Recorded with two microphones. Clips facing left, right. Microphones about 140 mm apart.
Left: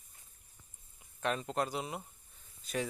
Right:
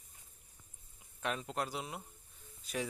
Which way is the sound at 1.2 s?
5° right (ahead or behind).